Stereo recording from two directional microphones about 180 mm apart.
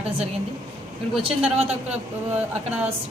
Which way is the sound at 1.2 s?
30° right (ahead or behind).